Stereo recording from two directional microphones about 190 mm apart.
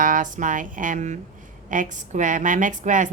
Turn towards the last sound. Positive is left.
turn(degrees=-40)  # may be behind; listen again after turning